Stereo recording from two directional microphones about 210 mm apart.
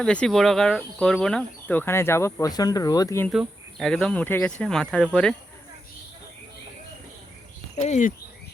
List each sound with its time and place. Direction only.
0.0 s speech: 5° left (ahead or behind)
3.2 s speech: centre (ahead or behind)
7.8 s speech: 35° left (ahead or behind)